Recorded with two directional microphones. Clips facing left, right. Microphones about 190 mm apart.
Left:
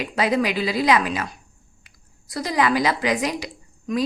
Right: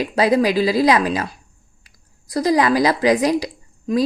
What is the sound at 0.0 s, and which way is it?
A woman's voice, 35° right (ahead or behind).